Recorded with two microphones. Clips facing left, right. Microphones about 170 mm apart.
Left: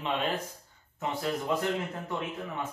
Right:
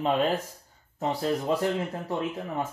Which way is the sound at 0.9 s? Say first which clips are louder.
Right 4 dB; 35° right (ahead or behind).